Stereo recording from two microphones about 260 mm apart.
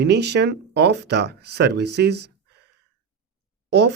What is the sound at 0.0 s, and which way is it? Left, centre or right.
Speech, right.